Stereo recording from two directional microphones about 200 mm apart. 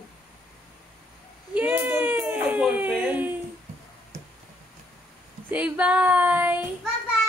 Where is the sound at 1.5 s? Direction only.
10° right (ahead or behind).